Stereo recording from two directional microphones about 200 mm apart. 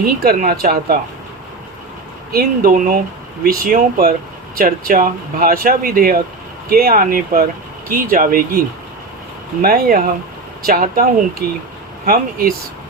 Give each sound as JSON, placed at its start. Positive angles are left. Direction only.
{"t": 0.3, "sound": "speech", "side_deg": -45}
{"t": 2.3, "sound": "speech", "side_deg": -50}